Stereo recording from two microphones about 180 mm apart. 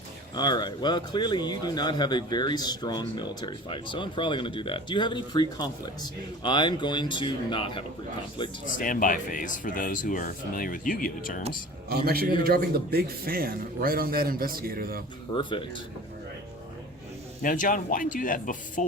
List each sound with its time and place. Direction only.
0.3 s speech: 25° left (ahead or behind)
8.6 s speech: 45° left (ahead or behind)
11.9 s a man's voice: 60° right (ahead or behind)
15.4 s speech: 25° left (ahead or behind)
17.4 s speech: 50° left (ahead or behind)